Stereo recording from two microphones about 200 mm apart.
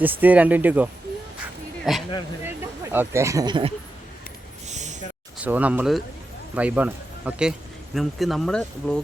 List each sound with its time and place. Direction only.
0.0 s speech: 10° right (ahead or behind)
2.4 s speech: 10° right (ahead or behind)
4.6 s a sound: 35° right (ahead or behind)
5.4 s speech: 5° right (ahead or behind)